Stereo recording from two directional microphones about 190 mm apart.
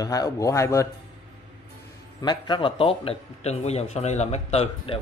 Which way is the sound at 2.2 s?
25° left (ahead or behind).